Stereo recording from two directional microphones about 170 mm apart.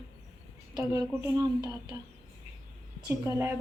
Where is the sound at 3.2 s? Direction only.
15° right (ahead or behind).